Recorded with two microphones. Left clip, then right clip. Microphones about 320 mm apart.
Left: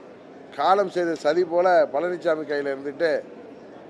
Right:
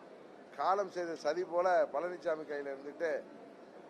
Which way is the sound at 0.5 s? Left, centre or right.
Left.